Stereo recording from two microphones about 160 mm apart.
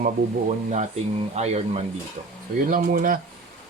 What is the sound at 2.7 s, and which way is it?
Speech, 60° right (ahead or behind).